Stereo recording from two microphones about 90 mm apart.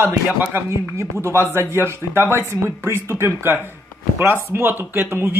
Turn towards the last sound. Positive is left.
turn(degrees=-25)  # may be behind; listen again after turning